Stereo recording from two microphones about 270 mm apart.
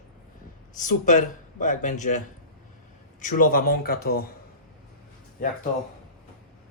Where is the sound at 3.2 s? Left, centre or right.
Left.